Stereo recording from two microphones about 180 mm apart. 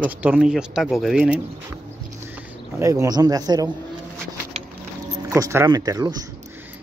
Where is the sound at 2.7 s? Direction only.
20° right (ahead or behind).